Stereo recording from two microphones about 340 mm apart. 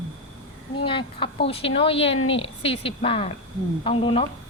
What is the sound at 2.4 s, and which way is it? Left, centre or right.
A woman's voice, centre.